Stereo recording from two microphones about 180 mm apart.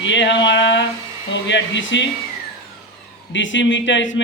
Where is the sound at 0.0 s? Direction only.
80° left.